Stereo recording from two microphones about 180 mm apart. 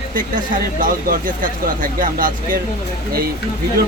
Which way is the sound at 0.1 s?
50° right (ahead or behind).